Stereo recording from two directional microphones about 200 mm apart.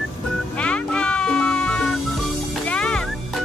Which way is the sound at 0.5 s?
5° left (ahead or behind).